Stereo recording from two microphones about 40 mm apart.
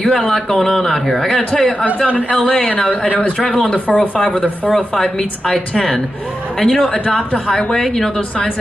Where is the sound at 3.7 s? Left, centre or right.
Left.